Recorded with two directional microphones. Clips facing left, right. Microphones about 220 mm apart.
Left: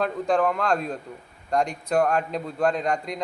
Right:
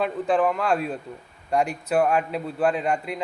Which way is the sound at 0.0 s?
5° right (ahead or behind).